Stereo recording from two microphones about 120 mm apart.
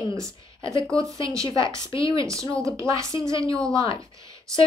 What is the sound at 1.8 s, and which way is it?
Speech, 45° left (ahead or behind).